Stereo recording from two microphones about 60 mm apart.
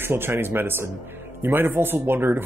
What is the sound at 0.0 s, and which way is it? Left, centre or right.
Speech, right.